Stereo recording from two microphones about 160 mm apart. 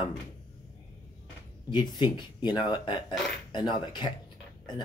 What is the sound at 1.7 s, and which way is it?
Speech, 25° left (ahead or behind).